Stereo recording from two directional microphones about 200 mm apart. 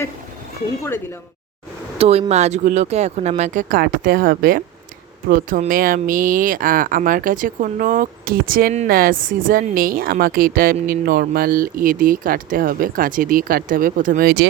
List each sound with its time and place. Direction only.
2.0 s speech: 30° right (ahead or behind); by 14.4 s 50° right (ahead or behind)